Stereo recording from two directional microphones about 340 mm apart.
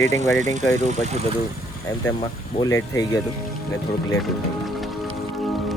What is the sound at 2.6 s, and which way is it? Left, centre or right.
Speech, centre.